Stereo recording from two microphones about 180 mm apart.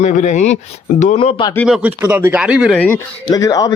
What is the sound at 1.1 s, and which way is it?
Speech, 30° left (ahead or behind).